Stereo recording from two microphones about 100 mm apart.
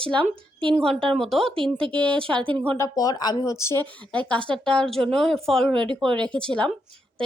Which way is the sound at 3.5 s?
25° left (ahead or behind).